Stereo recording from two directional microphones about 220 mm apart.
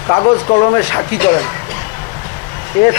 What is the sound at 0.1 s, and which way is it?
Speech, 25° left (ahead or behind).